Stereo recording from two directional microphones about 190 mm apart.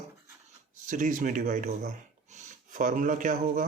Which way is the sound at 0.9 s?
45° right (ahead or behind).